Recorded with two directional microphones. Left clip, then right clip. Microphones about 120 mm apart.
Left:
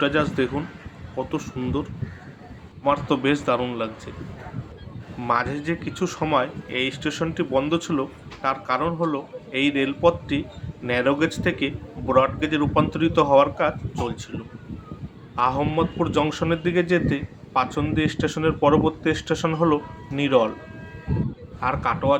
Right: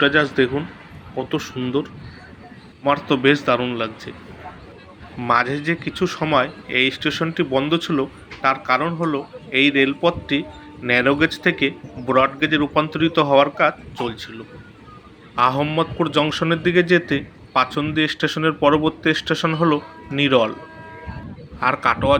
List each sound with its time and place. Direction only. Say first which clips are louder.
0.0 s a man's voice: right 5 dB; 5° right (ahead or behind)
5.2 s a man's voice: right 5 dB; 15° right (ahead or behind)
15.4 s speech: right 4 dB; 15° right (ahead or behind)
21.6 s speech: right 5 dB; 20° right (ahead or behind)